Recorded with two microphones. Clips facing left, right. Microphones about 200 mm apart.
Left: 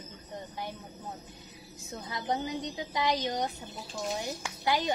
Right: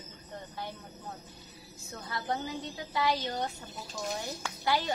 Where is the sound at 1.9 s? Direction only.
20° left (ahead or behind).